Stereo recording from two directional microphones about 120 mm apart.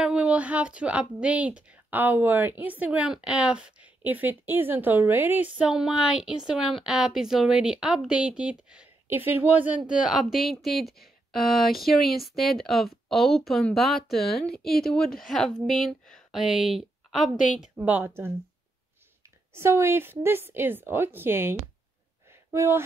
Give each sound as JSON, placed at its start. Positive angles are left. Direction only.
{"t": 0.0, "sound": "a woman's voice", "side_deg": -10}
{"t": 17.7, "sound": "a woman's voice", "side_deg": -15}
{"t": 19.5, "sound": "a woman's voice", "side_deg": -20}
{"t": 22.3, "sound": "a sound", "side_deg": -20}